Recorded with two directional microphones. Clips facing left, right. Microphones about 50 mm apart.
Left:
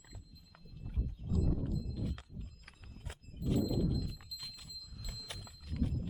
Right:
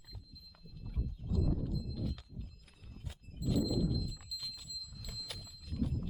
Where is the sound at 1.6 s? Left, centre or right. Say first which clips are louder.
Even; left.